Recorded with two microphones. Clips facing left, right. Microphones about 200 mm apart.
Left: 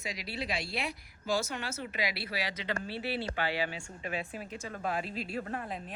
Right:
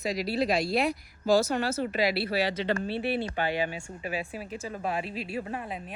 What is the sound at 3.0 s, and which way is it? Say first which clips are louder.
Speech: right 5 dB; 55° right (ahead or behind).